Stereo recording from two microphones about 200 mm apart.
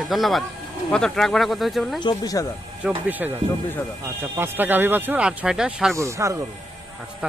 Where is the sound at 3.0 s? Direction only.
10° right (ahead or behind).